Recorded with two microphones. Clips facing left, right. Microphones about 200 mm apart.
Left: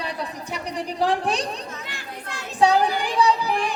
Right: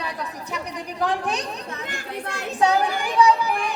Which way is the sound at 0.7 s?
30° left (ahead or behind).